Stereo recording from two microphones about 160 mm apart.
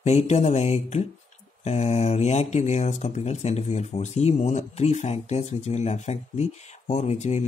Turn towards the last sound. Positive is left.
turn(degrees=45)  # may be behind; listen again after turning